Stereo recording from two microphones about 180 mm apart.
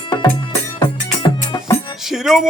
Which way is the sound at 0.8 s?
20° left (ahead or behind).